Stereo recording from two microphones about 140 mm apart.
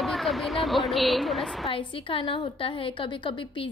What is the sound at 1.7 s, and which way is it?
A woman's voice, 40° left (ahead or behind).